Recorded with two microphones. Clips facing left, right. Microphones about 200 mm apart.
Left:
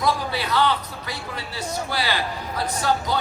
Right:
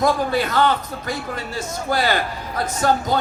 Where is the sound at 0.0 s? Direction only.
50° right (ahead or behind).